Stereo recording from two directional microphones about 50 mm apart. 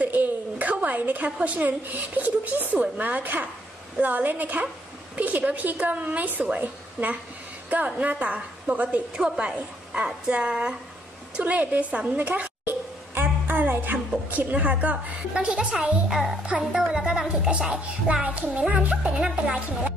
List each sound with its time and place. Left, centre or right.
0.0 s a woman's voice: right
9.1 s speech: centre
11.3 s a woman's voice: right
12.6 s a sound: right
14.3 s a woman's voice: right
15.3 s a woman's voice: centre
16.1 s speech: centre
18.2 s a woman's voice: right